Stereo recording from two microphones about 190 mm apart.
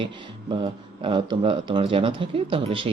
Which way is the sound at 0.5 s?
30° right (ahead or behind).